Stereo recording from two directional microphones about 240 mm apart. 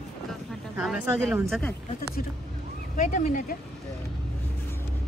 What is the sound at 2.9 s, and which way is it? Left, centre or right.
Speech, left.